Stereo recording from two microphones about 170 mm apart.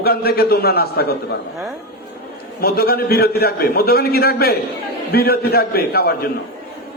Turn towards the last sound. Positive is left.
turn(degrees=65)  # may be behind; listen again after turning